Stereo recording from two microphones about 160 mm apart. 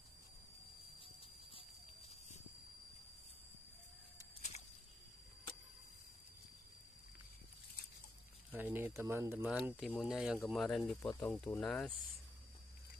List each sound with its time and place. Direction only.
1.0 s horse: 35° left (ahead or behind)
4.4 s a sound: 45° left (ahead or behind)
8.5 s speech: 10° right (ahead or behind)
11.1 s speech: 10° left (ahead or behind)